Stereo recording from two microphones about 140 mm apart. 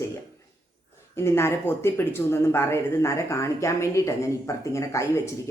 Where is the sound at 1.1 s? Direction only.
20° left (ahead or behind).